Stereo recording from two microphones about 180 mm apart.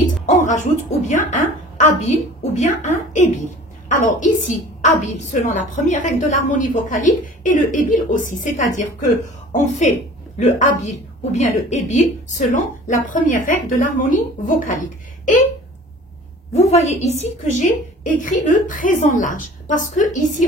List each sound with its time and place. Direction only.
0.0 s music: 45° left (ahead or behind)
1.0 s a woman's voice: 45° left (ahead or behind)
16.5 s a woman's voice: 40° left (ahead or behind)